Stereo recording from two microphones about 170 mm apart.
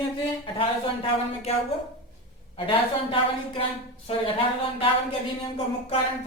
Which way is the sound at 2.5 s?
30° left (ahead or behind).